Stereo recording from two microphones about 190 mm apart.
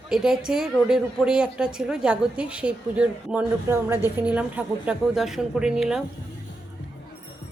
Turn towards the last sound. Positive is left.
turn(degrees=-5)  # may be behind; listen again after turning